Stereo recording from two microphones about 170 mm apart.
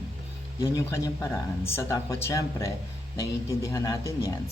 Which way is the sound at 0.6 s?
15° left (ahead or behind).